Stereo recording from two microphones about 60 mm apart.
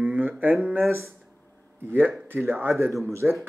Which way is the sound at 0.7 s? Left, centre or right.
Right.